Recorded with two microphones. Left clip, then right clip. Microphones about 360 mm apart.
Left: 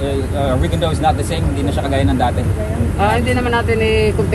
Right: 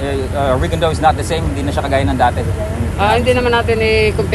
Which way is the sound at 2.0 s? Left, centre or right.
Centre.